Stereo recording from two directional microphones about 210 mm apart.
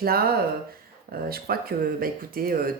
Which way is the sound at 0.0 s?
45° right (ahead or behind).